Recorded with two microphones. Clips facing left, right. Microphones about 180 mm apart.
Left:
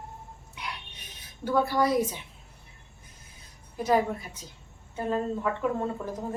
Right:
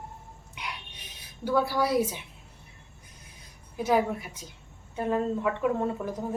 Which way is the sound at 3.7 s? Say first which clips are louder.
Even; 10° right (ahead or behind).